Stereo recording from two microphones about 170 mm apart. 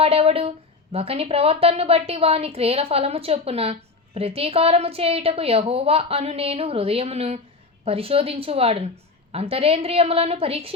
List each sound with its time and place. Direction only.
0.0 s a woman's voice: 35° right (ahead or behind)